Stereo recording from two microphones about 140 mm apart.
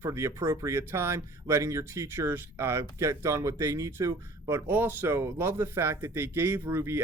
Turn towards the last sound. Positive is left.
turn(degrees=-15)  # may be behind; listen again after turning